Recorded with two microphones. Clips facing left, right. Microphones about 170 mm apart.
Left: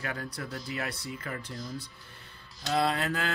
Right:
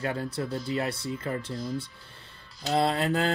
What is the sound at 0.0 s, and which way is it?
Speech, 25° right (ahead or behind).